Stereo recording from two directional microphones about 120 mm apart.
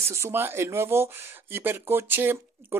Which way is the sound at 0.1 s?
20° right (ahead or behind).